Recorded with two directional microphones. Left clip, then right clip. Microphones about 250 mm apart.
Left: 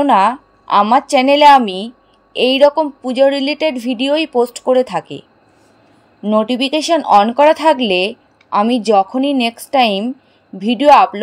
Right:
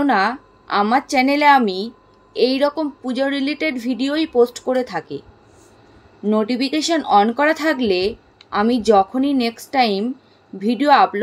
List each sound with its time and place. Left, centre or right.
0.1 s speech: left
6.2 s speech: left